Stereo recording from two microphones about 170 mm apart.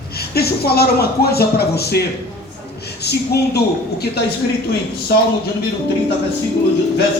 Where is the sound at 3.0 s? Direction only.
70° left (ahead or behind).